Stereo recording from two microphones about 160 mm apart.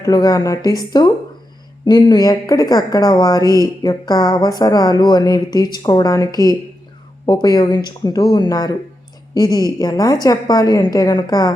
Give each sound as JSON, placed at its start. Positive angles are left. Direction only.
{"t": 0.0, "sound": "a woman's voice", "side_deg": 25}
{"t": 3.4, "sound": "speech", "side_deg": -20}
{"t": 3.8, "sound": "a woman's voice", "side_deg": 25}